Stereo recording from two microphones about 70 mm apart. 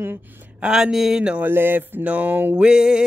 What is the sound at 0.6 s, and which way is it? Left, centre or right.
Speech, centre.